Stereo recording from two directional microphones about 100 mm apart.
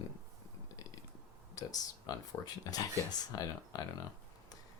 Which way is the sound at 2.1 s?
40° left (ahead or behind).